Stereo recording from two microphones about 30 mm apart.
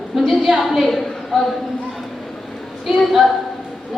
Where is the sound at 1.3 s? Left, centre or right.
Centre.